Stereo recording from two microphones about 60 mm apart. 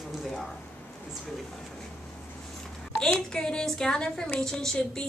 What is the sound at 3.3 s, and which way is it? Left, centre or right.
A woman's voice, centre.